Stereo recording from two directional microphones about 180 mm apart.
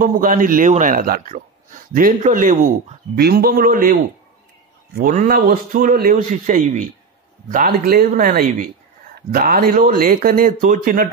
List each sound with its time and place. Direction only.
0.0 s speech: 50° right (ahead or behind)
3.2 s a man's voice: 60° right (ahead or behind)